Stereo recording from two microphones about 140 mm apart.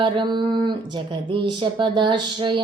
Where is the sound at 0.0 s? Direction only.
35° right (ahead or behind).